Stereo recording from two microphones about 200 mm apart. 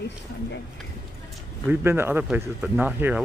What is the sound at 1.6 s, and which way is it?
Speech, 10° right (ahead or behind).